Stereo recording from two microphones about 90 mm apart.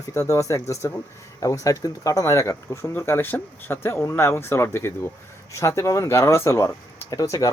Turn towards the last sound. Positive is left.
turn(degrees=40)  # may be behind; listen again after turning